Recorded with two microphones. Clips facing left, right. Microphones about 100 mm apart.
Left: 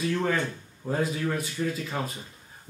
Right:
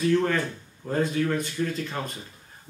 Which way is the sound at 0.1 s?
5° left (ahead or behind).